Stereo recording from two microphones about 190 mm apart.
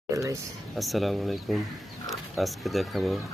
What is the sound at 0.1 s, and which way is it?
Speech, 15° right (ahead or behind).